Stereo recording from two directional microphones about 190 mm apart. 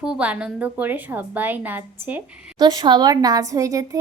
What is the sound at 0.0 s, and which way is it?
A woman's voice, 5° right (ahead or behind).